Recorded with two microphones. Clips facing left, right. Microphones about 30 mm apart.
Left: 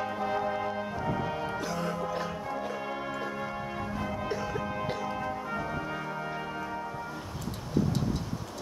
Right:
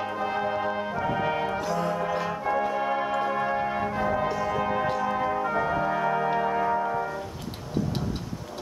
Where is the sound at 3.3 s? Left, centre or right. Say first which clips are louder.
Right 9 dB; right.